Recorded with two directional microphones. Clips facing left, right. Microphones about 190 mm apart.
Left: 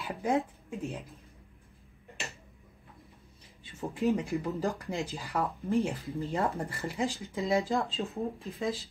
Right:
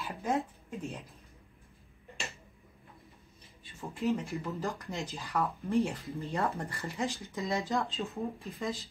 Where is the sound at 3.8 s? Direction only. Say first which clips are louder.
Left 3 dB; 15° left (ahead or behind).